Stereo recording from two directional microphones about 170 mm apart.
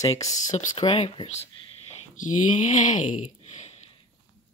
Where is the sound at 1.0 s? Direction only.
40° left (ahead or behind).